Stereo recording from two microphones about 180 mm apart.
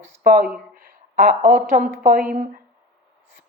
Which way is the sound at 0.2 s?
50° right (ahead or behind).